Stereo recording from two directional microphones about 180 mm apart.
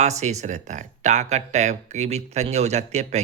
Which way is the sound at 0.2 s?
40° right (ahead or behind).